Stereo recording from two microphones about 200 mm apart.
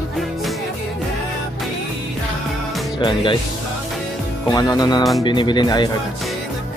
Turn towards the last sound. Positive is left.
turn(degrees=20)  # may be behind; listen again after turning